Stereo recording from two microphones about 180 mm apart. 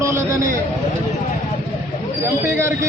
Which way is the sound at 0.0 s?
15° right (ahead or behind).